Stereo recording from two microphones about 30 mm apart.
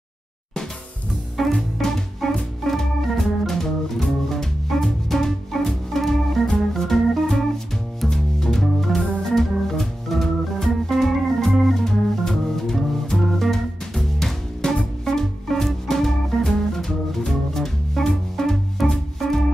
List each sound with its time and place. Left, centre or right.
1.5 s music: centre
2.6 s organ: centre
3.4 s music: centre
8.1 s music: centre
8.5 s organ: centre
11.8 s music: centre